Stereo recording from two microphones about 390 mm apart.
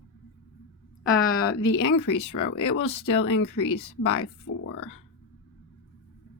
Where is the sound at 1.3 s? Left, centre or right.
Left.